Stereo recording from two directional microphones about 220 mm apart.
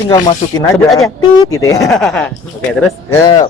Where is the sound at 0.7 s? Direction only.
Centre (ahead or behind).